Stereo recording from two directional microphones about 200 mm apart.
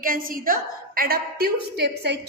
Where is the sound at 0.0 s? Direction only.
45° right (ahead or behind).